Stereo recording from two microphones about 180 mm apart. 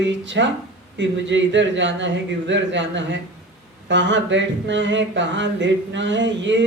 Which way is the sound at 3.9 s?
90° right.